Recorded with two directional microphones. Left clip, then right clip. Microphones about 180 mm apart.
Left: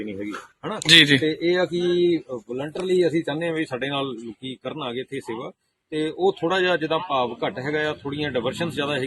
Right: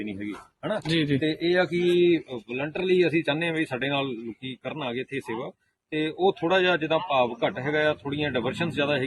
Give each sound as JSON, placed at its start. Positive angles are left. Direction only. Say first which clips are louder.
{"t": 0.0, "sound": "a sound", "louder": "left 3 dB", "side_deg": -25}
{"t": 0.9, "sound": "speech", "louder": "left 14 dB", "side_deg": 0}
{"t": 1.2, "sound": "speech", "louder": "left 2 dB", "side_deg": -20}
{"t": 2.1, "sound": "speech", "louder": "left 1 dB", "side_deg": 0}